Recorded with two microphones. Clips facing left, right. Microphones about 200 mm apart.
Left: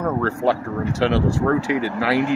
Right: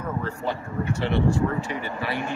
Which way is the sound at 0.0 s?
80° left.